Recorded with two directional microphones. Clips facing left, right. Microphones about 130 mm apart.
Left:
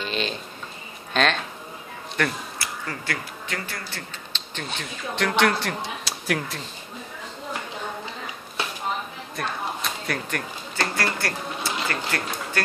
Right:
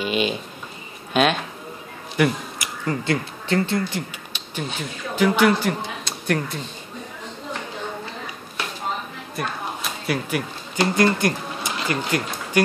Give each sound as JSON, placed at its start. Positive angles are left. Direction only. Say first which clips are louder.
{"t": 0.0, "sound": "speech", "louder": "right 6 dB", "side_deg": -10}
{"t": 2.1, "sound": "a sound", "louder": "right 6 dB", "side_deg": -10}
{"t": 2.9, "sound": "speech", "louder": "right 12 dB", "side_deg": -20}
{"t": 4.3, "sound": "speech", "louder": "right 4 dB", "side_deg": -5}
{"t": 9.4, "sound": "a sound", "louder": "right 1 dB", "side_deg": -5}
{"t": 10.8, "sound": "speech", "louder": "right 8 dB", "side_deg": -20}